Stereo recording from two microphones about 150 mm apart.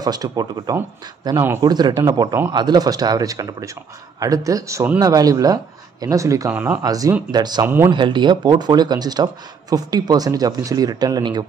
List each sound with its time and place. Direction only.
0.0 s speech: 25° right (ahead or behind)
1.7 s speech: 30° right (ahead or behind)
6.5 s speech: 10° right (ahead or behind)
6.8 s speech: 25° right (ahead or behind)
7.6 s speech: 15° right (ahead or behind)
7.9 s speech: 30° right (ahead or behind)